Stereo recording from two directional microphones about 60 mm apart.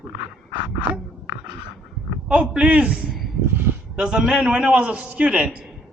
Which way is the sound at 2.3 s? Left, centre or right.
Centre.